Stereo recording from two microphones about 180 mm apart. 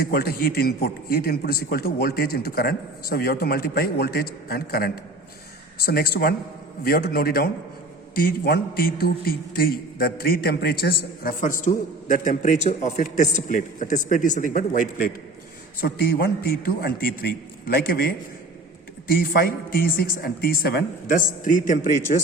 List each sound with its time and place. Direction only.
0.1 s a man's voice: 55° left (ahead or behind)